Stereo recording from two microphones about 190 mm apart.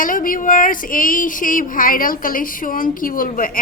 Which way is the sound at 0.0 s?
45° left (ahead or behind).